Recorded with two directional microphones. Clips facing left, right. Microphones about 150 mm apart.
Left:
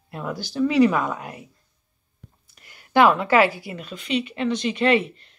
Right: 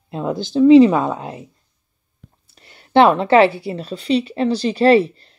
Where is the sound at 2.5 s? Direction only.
30° right (ahead or behind).